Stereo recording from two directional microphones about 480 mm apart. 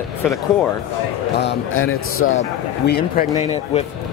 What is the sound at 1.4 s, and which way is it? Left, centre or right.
A man's voice, left.